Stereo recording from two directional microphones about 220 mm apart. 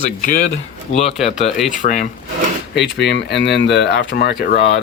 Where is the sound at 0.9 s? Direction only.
25° left (ahead or behind).